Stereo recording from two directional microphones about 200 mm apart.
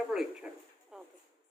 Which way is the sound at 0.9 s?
Centre (ahead or behind).